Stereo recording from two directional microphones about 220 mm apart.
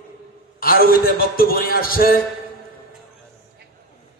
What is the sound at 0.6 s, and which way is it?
A man's voice, 40° left (ahead or behind).